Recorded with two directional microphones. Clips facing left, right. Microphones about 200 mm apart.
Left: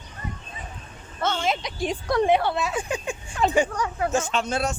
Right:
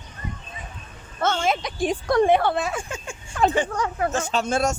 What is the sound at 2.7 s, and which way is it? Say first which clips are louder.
Speech: left 4 dB; 15° left (ahead or behind).